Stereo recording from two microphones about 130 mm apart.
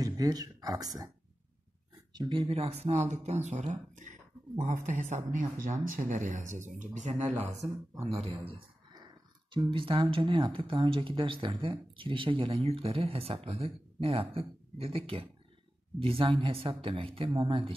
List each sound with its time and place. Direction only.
0.0 s speech: 30° right (ahead or behind)
2.1 s speech: 40° right (ahead or behind)
9.5 s speech: 40° right (ahead or behind)